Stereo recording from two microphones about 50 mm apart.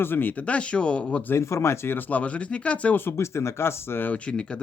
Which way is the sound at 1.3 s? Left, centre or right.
Left.